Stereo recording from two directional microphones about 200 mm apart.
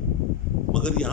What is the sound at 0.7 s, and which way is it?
Speech, 5° left (ahead or behind).